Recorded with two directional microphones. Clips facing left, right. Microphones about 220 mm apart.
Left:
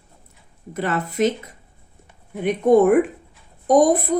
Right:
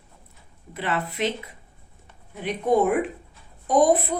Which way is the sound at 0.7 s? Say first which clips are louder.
Left 6 dB; 45° left (ahead or behind).